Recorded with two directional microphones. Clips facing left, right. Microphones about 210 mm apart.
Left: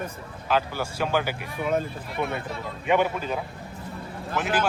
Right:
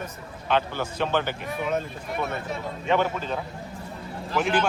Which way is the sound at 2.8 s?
15° left (ahead or behind).